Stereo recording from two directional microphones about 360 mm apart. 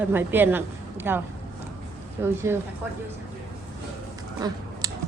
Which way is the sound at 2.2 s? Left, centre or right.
Centre.